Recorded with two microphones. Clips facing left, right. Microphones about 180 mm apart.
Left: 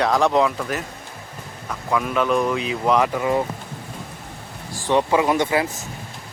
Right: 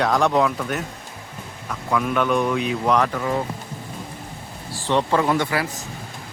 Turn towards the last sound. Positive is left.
turn(degrees=20)  # may be behind; listen again after turning